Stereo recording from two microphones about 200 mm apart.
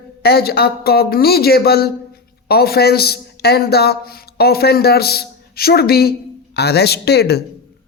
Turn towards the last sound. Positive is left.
turn(degrees=55)  # may be behind; listen again after turning